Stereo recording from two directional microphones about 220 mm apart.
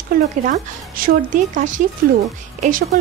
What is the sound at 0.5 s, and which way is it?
A woman's voice, 40° right (ahead or behind).